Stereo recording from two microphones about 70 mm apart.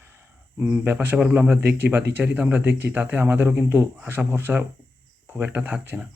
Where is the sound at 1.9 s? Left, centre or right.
Right.